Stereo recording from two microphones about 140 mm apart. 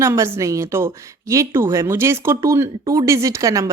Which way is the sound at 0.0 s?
20° right (ahead or behind).